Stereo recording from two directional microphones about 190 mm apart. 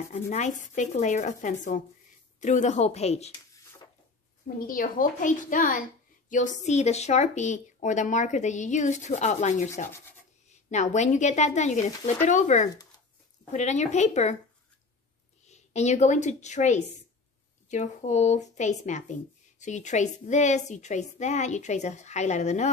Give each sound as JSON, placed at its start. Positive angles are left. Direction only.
{"t": 0.1, "sound": "speech", "side_deg": 40}
{"t": 4.6, "sound": "a woman's voice", "side_deg": 45}
{"t": 15.4, "sound": "a woman's voice", "side_deg": 35}